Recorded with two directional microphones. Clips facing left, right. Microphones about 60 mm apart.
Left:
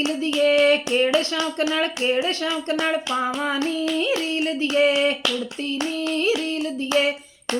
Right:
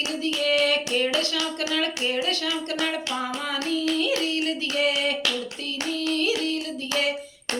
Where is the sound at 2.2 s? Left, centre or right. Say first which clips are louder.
Left 3 dB; left.